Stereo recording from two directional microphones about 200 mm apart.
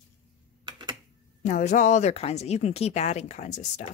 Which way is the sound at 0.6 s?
25° right (ahead or behind).